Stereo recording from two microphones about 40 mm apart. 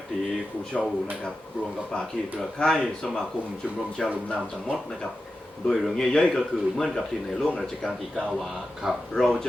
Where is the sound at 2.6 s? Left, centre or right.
Centre.